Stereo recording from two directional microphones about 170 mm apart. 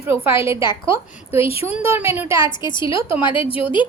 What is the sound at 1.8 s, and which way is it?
Speech, 15° right (ahead or behind).